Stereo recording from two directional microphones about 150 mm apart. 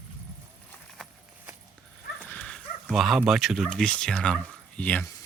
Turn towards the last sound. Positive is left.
turn(degrees=10)  # may be behind; listen again after turning